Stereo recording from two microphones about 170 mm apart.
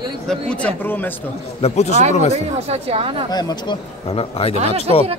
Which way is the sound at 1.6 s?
40° left (ahead or behind).